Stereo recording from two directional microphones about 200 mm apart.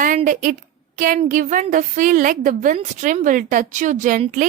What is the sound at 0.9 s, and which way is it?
A woman's voice, 40° right (ahead or behind).